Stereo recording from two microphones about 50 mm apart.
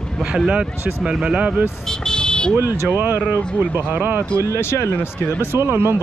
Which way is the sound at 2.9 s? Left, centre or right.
Right.